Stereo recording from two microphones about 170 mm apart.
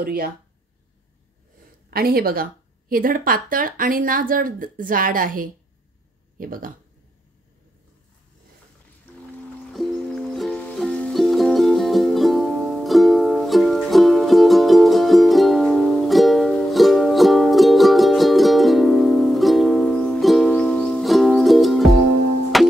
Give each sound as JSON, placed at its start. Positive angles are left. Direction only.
{"t": 0.0, "sound": "speech", "side_deg": -60}
{"t": 1.9, "sound": "speech", "side_deg": -65}
{"t": 9.8, "sound": "music", "side_deg": 0}